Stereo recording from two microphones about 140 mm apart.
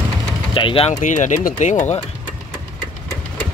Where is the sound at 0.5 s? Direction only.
40° left (ahead or behind).